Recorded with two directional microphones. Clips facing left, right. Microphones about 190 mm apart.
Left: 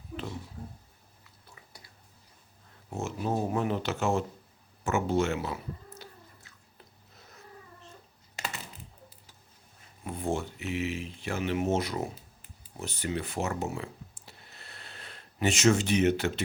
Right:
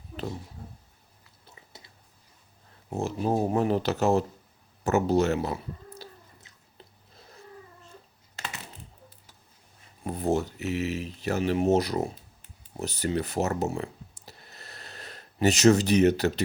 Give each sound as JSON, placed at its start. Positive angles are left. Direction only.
{"t": 1.5, "sound": "a sound", "side_deg": -25}
{"t": 2.9, "sound": "speech", "side_deg": -35}
{"t": 10.0, "sound": "speech", "side_deg": -40}